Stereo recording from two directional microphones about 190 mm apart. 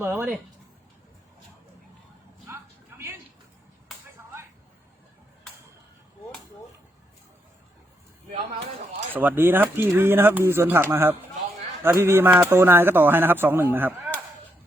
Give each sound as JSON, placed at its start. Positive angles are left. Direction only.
{"t": 0.0, "sound": "speech", "side_deg": -10}
{"t": 4.2, "sound": "whip", "side_deg": -10}
{"t": 8.3, "sound": "speech", "side_deg": -35}
{"t": 9.1, "sound": "speech", "side_deg": -10}